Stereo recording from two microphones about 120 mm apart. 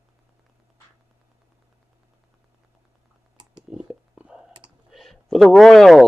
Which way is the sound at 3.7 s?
10° right (ahead or behind).